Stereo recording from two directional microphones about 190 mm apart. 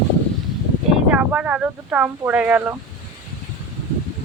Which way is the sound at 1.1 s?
5° right (ahead or behind).